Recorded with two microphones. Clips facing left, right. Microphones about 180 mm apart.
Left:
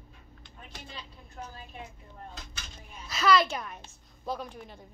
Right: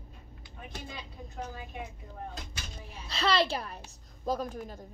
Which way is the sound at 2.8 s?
30° right (ahead or behind).